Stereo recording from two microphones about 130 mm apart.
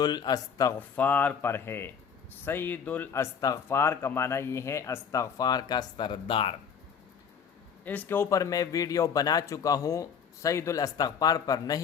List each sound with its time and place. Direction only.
0.0 s speech: 30° left (ahead or behind)
0.8 s speech: 15° left (ahead or behind); by 6.6 s 40° left (ahead or behind)
7.9 s speech: 15° left (ahead or behind)